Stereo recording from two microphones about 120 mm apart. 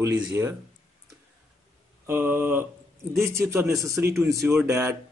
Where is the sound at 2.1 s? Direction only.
20° right (ahead or behind).